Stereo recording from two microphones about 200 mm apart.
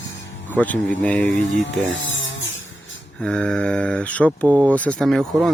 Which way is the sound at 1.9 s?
70° left (ahead or behind).